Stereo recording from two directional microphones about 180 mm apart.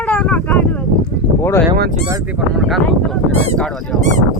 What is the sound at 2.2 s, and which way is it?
Speech, centre (ahead or behind).